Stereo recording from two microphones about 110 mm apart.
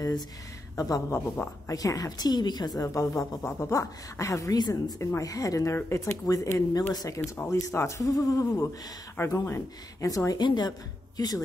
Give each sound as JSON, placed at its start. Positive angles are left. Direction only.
{"t": 0.7, "sound": "speech", "side_deg": 35}
{"t": 1.1, "sound": "a woman's voice", "side_deg": 20}
{"t": 1.7, "sound": "speech", "side_deg": 30}
{"t": 2.8, "sound": "a woman's voice", "side_deg": 30}
{"t": 7.2, "sound": "a woman's voice", "side_deg": 20}